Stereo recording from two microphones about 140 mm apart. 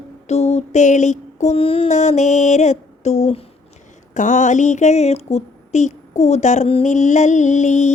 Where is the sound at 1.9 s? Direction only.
55° left (ahead or behind).